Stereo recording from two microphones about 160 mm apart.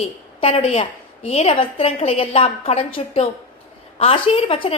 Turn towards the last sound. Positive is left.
turn(degrees=35)  # may be behind; listen again after turning